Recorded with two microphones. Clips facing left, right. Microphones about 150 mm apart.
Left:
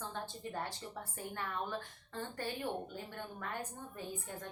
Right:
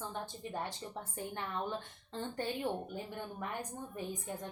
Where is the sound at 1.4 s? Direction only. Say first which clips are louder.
Right 1 dB; 20° right (ahead or behind).